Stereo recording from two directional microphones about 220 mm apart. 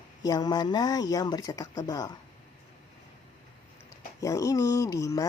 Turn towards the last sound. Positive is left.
turn(degrees=15)  # may be behind; listen again after turning